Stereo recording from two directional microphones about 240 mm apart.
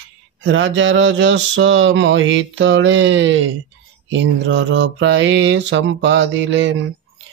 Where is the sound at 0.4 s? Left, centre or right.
Right.